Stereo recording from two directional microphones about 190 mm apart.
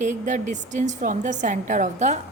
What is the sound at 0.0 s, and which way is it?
A woman's voice, 40° right (ahead or behind).